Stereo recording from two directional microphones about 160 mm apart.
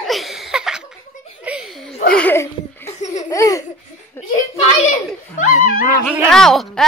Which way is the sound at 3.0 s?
45° left (ahead or behind).